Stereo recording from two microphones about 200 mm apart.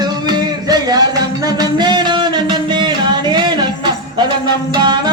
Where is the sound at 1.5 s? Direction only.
20° right (ahead or behind).